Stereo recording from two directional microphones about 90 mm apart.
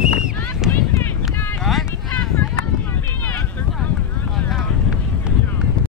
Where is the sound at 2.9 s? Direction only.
20° left (ahead or behind).